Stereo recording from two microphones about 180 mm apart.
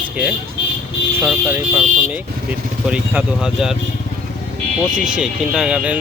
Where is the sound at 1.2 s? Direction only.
10° right (ahead or behind).